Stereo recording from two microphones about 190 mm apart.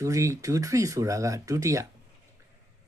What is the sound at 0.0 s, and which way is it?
Speech, 15° right (ahead or behind).